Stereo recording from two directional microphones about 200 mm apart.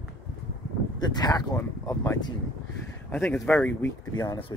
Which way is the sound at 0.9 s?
20° left (ahead or behind).